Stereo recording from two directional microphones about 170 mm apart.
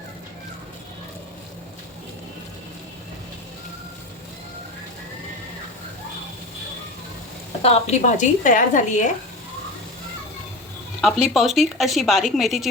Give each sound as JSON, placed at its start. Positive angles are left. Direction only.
{"t": 7.6, "sound": "a woman's voice", "side_deg": 40}
{"t": 11.0, "sound": "speech", "side_deg": 0}